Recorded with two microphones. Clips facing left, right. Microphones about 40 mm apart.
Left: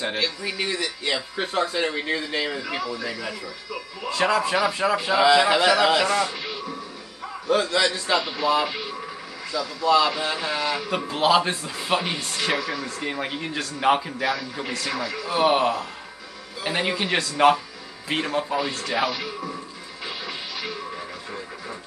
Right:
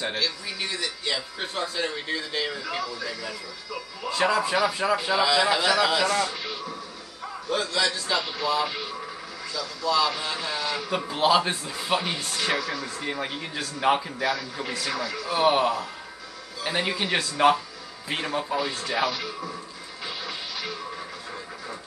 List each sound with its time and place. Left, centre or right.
0.1 s a man's voice: left
2.5 s speech: centre
5.2 s speech: left
6.2 s a sound: centre
7.4 s a man's voice: left
8.2 s speech: centre
8.6 s radio: centre
9.8 s speech: left
10.3 s speech: centre
20.2 s music: centre